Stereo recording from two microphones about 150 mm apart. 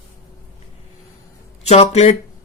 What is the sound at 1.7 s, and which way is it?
Speech, 45° left (ahead or behind).